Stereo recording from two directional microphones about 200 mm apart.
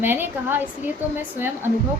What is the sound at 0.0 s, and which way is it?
Speech, 10° right (ahead or behind).